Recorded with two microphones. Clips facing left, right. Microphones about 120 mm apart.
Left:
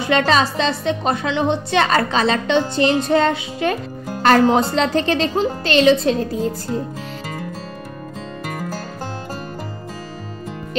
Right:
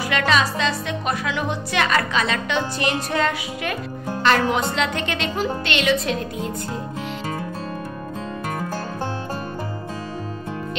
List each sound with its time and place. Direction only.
0.0 s speech: 30° left (ahead or behind)